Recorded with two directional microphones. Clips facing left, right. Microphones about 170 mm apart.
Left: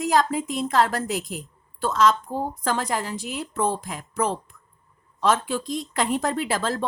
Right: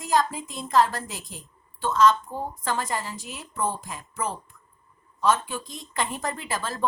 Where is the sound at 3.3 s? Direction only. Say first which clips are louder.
Left 4 dB; 90° left.